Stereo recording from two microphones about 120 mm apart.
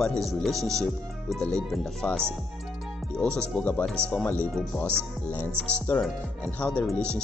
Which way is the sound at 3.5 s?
15° left (ahead or behind).